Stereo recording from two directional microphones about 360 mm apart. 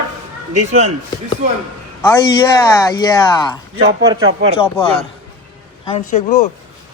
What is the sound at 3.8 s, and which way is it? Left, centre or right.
Speech, centre.